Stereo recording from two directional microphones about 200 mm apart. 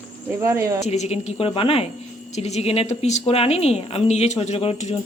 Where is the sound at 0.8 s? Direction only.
35° left (ahead or behind).